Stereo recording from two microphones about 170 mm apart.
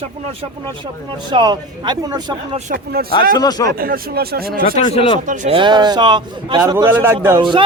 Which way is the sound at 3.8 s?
60° right (ahead or behind).